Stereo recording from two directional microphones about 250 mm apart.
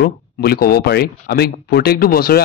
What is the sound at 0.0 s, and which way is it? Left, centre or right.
Speech, left.